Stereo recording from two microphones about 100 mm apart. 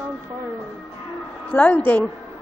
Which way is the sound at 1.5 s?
15° left (ahead or behind).